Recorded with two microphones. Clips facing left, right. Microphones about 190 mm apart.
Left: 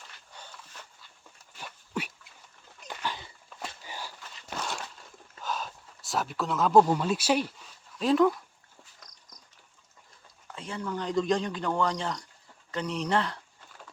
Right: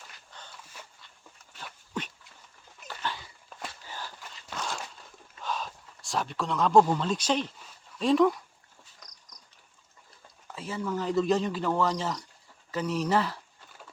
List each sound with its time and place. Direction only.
1.5 s dog: 10° left (ahead or behind)
3.8 s a sound: 15° left (ahead or behind)
5.4 s speech: centre (ahead or behind)
10.5 s speech: 5° right (ahead or behind)